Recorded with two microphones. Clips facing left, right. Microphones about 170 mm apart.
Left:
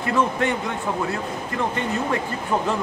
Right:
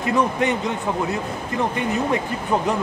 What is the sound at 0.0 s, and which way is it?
Speech, 20° right (ahead or behind).